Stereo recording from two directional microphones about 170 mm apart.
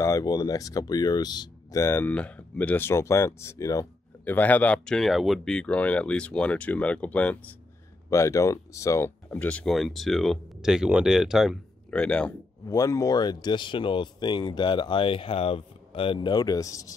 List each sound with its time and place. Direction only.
0.0 s speech: 20° left (ahead or behind)
12.6 s speech: 20° left (ahead or behind)